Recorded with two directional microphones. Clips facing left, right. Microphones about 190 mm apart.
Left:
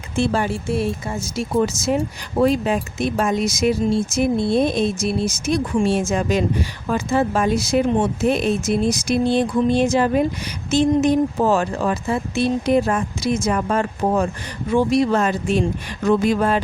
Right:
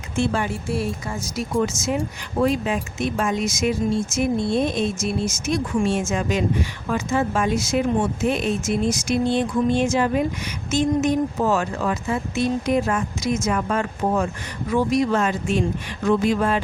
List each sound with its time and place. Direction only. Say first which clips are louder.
0.2 s speech: left 3 dB; 35° left (ahead or behind)
0.7 s speech: left 3 dB; 25° left (ahead or behind); by 16.6 s 40° left (ahead or behind)